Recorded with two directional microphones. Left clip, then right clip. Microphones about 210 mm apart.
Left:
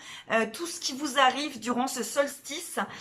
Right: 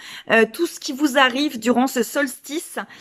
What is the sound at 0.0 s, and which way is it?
A woman's voice, 45° right (ahead or behind).